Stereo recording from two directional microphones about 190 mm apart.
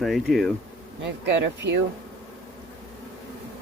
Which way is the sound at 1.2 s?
65° right (ahead or behind).